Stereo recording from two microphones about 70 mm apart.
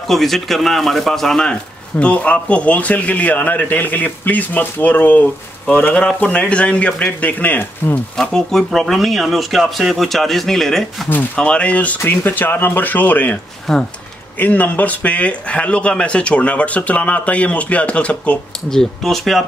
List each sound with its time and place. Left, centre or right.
0.1 s speech: centre; by 8.0 s left
8.2 s speech: centre
11.3 s speech: centre
12.0 s speech: left
13.7 s speech: centre
14.4 s speech: left
18.7 s speech: centre